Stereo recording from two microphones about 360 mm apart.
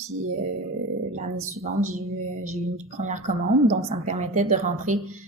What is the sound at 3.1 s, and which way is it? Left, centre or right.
A woman's voice, centre.